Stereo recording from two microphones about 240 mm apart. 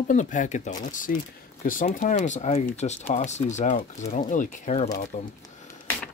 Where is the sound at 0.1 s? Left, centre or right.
Left.